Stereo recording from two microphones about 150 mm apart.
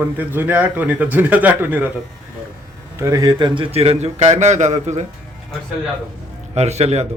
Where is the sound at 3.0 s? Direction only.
25° right (ahead or behind); by 5.0 s 50° right (ahead or behind).